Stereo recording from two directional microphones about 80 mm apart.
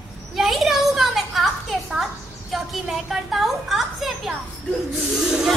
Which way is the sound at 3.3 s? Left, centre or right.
Centre.